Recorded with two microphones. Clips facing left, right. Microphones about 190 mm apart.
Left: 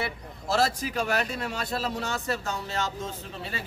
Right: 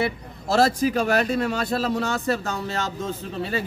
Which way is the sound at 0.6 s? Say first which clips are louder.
Right 7 dB; 50° right (ahead or behind).